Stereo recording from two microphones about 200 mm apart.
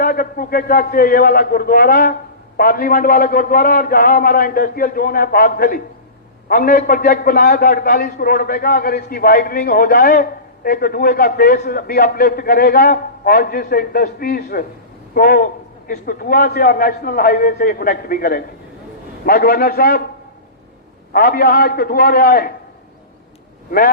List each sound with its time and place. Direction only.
0.0 s a man's voice: 45° left (ahead or behind)
21.1 s a man's voice: 50° left (ahead or behind)